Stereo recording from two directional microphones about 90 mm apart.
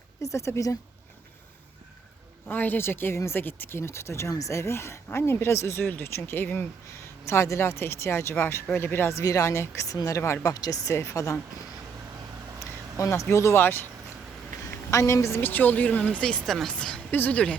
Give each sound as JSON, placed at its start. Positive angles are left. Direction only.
{"t": 0.2, "sound": "a woman's voice", "side_deg": 35}
{"t": 2.5, "sound": "speech", "side_deg": 20}
{"t": 7.3, "sound": "a woman's voice", "side_deg": 35}
{"t": 10.5, "sound": "a woman's voice", "side_deg": 45}
{"t": 12.5, "sound": "speech", "side_deg": 35}
{"t": 14.8, "sound": "a woman's voice", "side_deg": 35}
{"t": 15.4, "sound": "speech", "side_deg": 20}
{"t": 16.5, "sound": "speech", "side_deg": 0}